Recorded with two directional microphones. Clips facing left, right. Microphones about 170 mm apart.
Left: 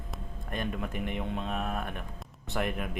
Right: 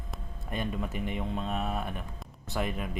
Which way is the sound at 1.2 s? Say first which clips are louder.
Right 1 dB; centre (ahead or behind).